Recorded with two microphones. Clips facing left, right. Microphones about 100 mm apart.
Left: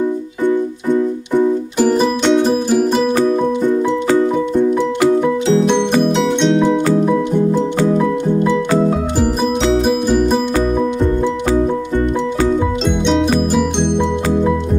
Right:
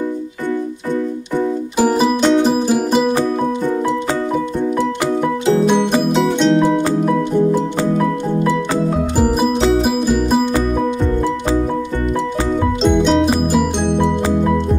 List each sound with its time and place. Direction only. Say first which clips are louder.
1.8 s music: right 1 dB; 5° right (ahead or behind)
9.6 s music: left 2 dB; centre (ahead or behind)
12.8 s music: right 5 dB; centre (ahead or behind)